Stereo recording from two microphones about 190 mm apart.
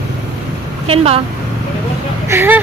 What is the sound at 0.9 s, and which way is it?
Speech, 30° right (ahead or behind).